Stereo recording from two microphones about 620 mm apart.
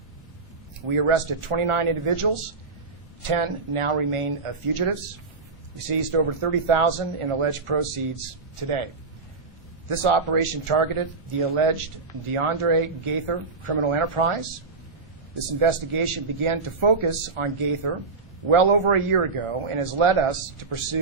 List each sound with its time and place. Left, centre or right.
0.8 s a man's voice: right
9.9 s a man's voice: right
15.4 s a man's voice: right